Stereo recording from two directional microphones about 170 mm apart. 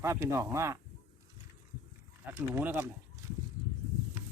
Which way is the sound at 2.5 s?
10° right (ahead or behind).